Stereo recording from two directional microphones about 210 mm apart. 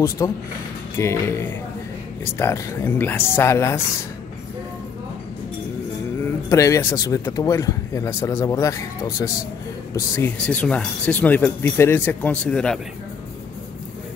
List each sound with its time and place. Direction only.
0.2 s speech: 15° left (ahead or behind)
6.5 s speech: 15° left (ahead or behind)